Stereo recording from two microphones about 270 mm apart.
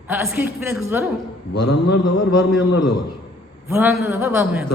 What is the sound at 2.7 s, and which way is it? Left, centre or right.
Speech, left.